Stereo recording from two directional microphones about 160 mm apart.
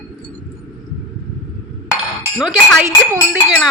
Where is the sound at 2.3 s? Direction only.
5° right (ahead or behind).